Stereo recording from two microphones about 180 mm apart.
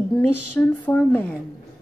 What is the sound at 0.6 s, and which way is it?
Speech, 10° left (ahead or behind).